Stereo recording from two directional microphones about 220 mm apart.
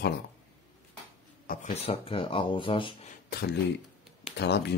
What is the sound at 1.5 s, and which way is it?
Speech, 30° left (ahead or behind).